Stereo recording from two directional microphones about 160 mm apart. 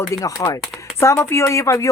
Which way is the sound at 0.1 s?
20° left (ahead or behind).